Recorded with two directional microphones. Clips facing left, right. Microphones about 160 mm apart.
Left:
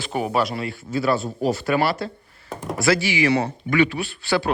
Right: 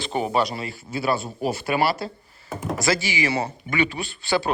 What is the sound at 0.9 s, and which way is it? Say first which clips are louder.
Speech: left 3 dB; 15° right (ahead or behind).